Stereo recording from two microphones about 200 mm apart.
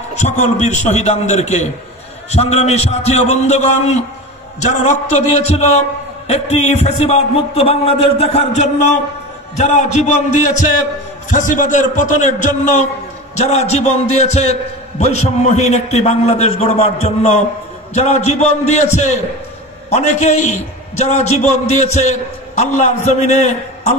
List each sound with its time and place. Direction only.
0.2 s a man's voice: 35° left (ahead or behind)
5.0 s a man's voice: 35° left (ahead or behind)